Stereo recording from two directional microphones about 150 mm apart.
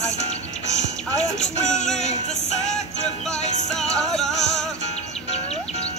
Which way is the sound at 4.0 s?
Centre (ahead or behind).